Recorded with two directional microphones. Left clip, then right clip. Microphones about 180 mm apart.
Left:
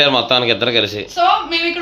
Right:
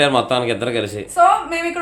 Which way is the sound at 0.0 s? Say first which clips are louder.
Left 3 dB; 20° right (ahead or behind).